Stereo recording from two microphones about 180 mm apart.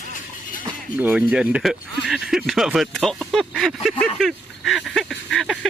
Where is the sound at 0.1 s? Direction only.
50° left (ahead or behind).